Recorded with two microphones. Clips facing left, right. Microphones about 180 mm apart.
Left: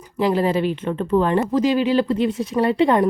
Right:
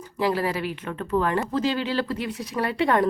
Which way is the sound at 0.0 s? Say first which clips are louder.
Left 5 dB; 20° left (ahead or behind).